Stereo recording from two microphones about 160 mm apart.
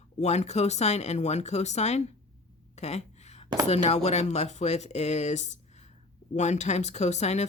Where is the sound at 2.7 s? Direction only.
45° left (ahead or behind).